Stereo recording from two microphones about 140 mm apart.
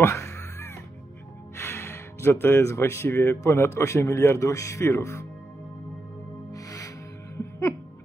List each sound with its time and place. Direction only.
0.0 s music: 20° left (ahead or behind)
1.6 s speech: 15° left (ahead or behind)
6.5 s music: 25° left (ahead or behind)